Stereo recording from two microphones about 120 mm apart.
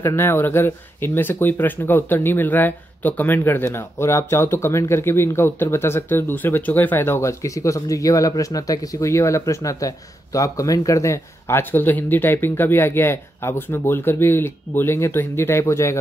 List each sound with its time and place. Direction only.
0.0 s speech: 20° left (ahead or behind)